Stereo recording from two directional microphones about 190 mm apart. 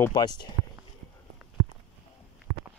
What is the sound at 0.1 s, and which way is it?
Speech, 20° left (ahead or behind).